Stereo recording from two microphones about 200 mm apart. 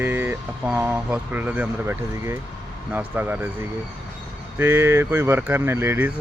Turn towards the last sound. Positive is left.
turn(degrees=-10)  # may be behind; listen again after turning